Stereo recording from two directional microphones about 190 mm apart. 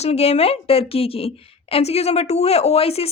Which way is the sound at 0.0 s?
35° left (ahead or behind).